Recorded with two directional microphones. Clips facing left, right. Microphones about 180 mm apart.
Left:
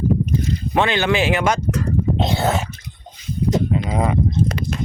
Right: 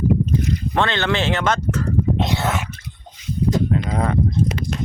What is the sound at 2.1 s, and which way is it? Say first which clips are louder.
Speech: left 2 dB; 30° left (ahead or behind).